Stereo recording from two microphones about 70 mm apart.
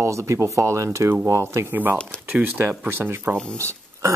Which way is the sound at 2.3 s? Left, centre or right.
Right.